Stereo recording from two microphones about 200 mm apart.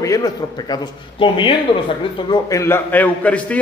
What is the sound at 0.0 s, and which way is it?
A man's voice, 15° left (ahead or behind).